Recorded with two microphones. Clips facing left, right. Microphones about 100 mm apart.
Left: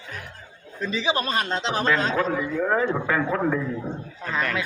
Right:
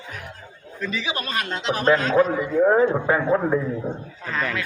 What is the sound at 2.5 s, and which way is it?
A man's voice, 25° right (ahead or behind).